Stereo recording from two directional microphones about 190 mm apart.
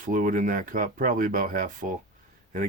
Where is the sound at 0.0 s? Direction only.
45° right (ahead or behind).